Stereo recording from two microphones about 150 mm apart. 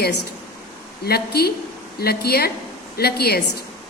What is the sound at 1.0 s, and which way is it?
A woman's voice, 90° left.